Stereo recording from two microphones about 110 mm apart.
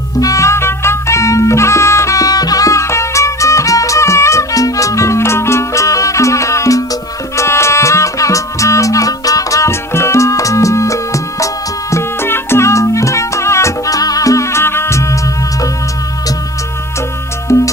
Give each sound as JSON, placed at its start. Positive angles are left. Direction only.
{"t": 0.2, "sound": "music", "side_deg": 30}
{"t": 17.5, "sound": "music", "side_deg": 25}